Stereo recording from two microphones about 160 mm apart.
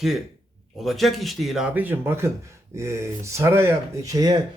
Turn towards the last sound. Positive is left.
turn(degrees=-25)  # may be behind; listen again after turning